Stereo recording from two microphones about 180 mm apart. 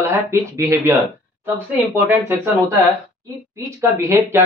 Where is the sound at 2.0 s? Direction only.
10° right (ahead or behind).